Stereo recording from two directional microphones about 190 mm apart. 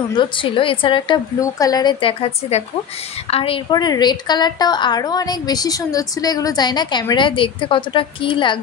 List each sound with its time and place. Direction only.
0.1 s a woman's voice: 25° left (ahead or behind)